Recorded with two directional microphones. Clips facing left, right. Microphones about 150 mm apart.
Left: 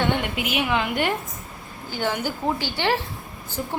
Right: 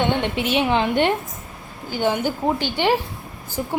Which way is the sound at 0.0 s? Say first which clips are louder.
Right 3 dB; 30° right (ahead or behind).